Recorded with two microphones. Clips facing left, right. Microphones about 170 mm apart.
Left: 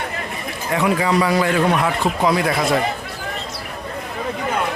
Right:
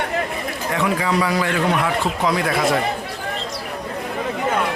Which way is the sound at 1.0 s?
25° left (ahead or behind).